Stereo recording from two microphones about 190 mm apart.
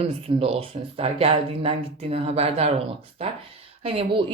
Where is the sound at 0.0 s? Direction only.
30° right (ahead or behind).